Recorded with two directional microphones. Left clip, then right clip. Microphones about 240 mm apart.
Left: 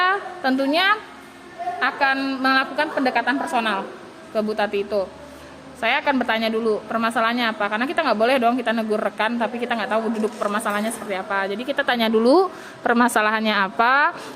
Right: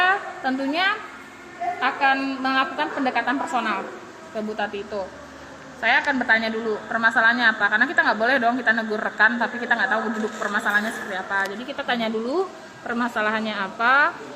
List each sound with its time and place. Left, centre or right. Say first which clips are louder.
0.0 s a sound: even; left
1.8 s a woman's voice: left 1 dB; left
5.8 s a woman's voice: even; left